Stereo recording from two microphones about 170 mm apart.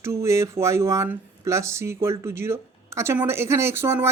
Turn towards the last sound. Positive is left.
turn(degrees=-15)  # may be behind; listen again after turning